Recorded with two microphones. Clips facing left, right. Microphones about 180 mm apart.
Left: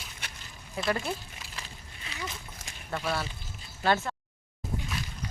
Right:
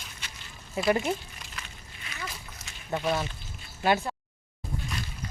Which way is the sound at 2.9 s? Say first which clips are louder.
Right 4 dB; 15° right (ahead or behind).